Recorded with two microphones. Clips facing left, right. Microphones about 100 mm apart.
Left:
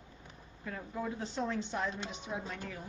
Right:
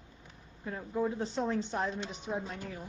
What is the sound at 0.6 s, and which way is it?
Speech, 25° right (ahead or behind).